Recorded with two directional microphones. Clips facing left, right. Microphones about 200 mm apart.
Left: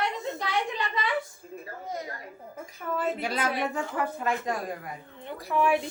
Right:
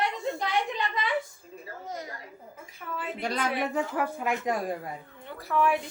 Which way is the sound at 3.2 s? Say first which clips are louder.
Even; 5° left (ahead or behind).